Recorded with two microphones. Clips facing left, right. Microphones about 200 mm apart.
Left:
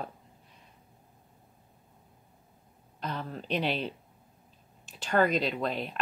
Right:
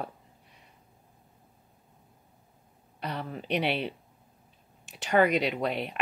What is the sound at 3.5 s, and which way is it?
Speech, 70° right (ahead or behind).